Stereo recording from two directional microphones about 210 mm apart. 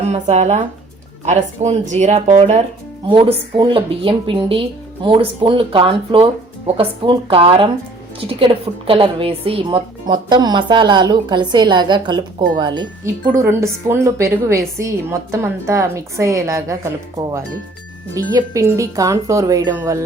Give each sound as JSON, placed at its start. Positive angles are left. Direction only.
{"t": 0.1, "sound": "a woman's voice", "side_deg": -30}